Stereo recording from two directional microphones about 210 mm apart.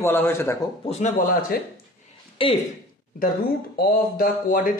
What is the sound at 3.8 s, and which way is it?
Speech, 45° left (ahead or behind).